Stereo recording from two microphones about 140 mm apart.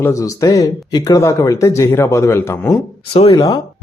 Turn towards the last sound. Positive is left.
turn(degrees=30)  # may be behind; listen again after turning